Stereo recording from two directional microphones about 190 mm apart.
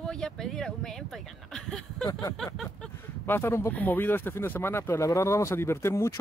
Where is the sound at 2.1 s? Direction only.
20° left (ahead or behind).